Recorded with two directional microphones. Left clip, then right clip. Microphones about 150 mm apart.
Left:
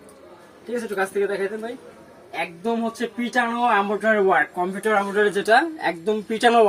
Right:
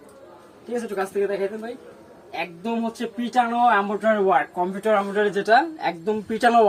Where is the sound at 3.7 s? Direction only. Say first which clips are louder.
Left 1 dB; centre (ahead or behind).